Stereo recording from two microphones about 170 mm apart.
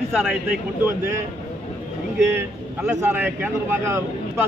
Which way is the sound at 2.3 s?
10° right (ahead or behind).